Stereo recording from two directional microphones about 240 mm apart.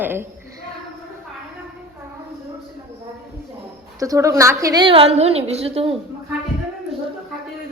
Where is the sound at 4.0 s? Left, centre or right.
Centre.